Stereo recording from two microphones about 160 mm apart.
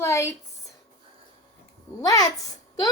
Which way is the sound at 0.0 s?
15° left (ahead or behind).